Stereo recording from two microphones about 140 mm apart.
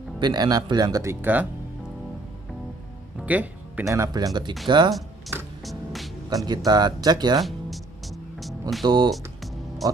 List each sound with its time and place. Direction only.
0.2 s speech: 30° right (ahead or behind)
1.2 s speech: 10° right (ahead or behind)
3.2 s music: 10° right (ahead or behind)
3.8 s speech: 20° right (ahead or behind)
6.3 s speech: 30° right (ahead or behind)
7.3 s music: centre (ahead or behind)
8.8 s speech: 35° right (ahead or behind)
9.8 s speech: centre (ahead or behind)